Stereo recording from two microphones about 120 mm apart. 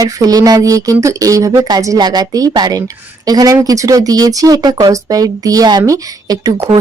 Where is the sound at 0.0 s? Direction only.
30° right (ahead or behind).